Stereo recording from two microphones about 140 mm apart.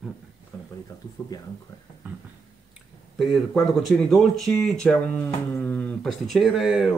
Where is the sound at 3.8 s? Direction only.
Centre (ahead or behind).